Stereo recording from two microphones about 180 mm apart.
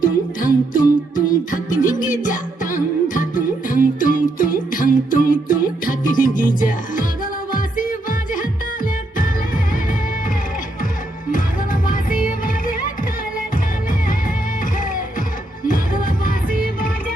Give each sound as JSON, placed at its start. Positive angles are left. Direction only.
{"t": 0.0, "sound": "music", "side_deg": 50}
{"t": 11.3, "sound": "music", "side_deg": 50}
{"t": 15.6, "sound": "music", "side_deg": 50}